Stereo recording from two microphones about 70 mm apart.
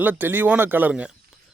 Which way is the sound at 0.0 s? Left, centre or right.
Right.